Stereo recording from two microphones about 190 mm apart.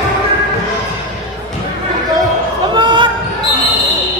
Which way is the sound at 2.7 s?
25° right (ahead or behind).